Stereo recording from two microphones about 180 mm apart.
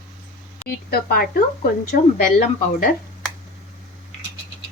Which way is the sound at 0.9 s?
55° left (ahead or behind).